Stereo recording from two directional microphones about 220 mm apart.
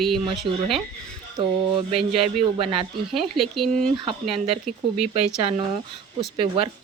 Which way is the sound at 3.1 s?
Centre (ahead or behind).